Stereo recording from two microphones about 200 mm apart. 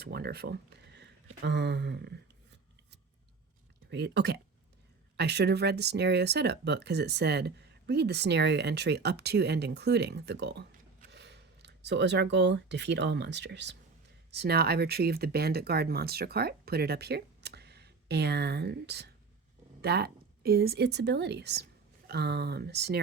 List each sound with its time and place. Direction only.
0.0 s speech: 50° right (ahead or behind)
3.8 s speech: 60° right (ahead or behind)